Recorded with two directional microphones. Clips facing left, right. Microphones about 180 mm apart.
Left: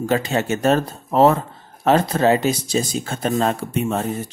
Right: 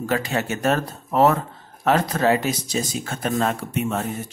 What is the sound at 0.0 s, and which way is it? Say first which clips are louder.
Speech: left 3 dB; 25° left (ahead or behind).